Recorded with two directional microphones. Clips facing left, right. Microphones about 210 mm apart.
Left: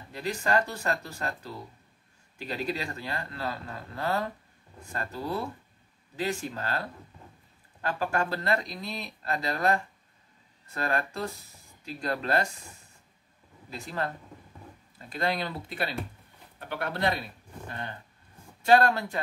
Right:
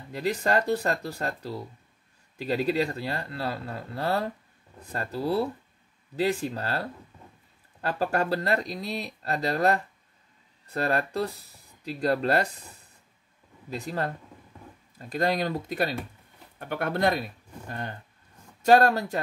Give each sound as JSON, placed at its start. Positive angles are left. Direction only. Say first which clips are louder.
{"t": 0.1, "sound": "speech", "louder": "right 3 dB", "side_deg": -40}
{"t": 7.8, "sound": "speech", "louder": "right 3 dB", "side_deg": -40}
{"t": 13.7, "sound": "speech", "louder": "right 3 dB", "side_deg": -40}